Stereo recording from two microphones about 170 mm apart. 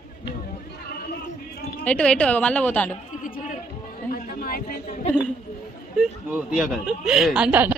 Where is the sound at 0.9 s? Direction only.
65° left (ahead or behind).